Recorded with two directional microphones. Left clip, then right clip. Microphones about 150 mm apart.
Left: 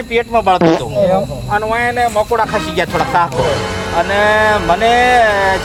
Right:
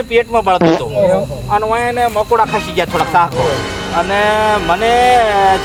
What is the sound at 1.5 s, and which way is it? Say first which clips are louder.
Speech: right 1 dB; 25° left (ahead or behind).